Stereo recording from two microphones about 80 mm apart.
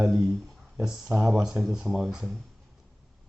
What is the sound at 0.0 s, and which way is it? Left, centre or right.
Speech, centre.